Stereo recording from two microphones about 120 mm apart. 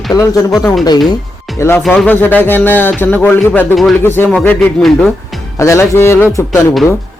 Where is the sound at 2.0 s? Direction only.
15° left (ahead or behind).